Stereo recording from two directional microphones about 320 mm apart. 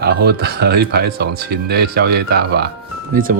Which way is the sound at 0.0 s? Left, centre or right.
Right.